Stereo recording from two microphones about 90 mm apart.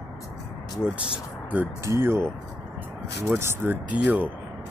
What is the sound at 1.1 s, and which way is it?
Speech, 20° right (ahead or behind).